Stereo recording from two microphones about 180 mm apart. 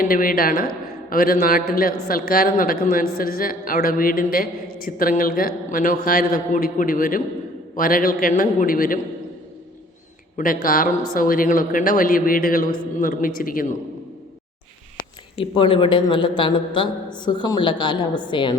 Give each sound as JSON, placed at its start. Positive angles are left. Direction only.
{"t": 0.0, "sound": "a man's voice", "side_deg": 50}
{"t": 10.3, "sound": "a man's voice", "side_deg": 50}
{"t": 14.9, "sound": "a man's voice", "side_deg": 25}